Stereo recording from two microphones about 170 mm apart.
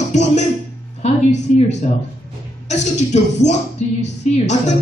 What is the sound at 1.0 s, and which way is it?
Music, 40° left (ahead or behind).